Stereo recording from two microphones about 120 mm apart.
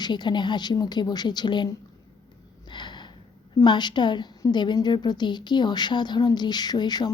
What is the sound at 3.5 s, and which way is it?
A woman's voice, 40° left (ahead or behind).